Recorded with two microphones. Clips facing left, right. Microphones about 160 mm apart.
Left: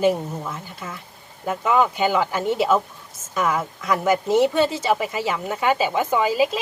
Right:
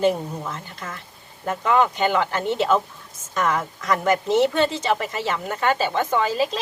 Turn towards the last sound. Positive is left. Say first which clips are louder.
# left 2 dB
turn(degrees=10)  # may be behind; listen again after turning